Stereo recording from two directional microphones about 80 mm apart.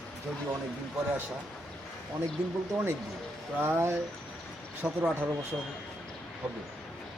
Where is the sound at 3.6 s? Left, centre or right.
Right.